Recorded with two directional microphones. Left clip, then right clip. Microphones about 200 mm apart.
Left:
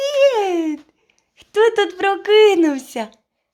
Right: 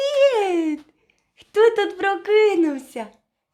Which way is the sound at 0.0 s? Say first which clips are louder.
Left 2 dB; 5° left (ahead or behind).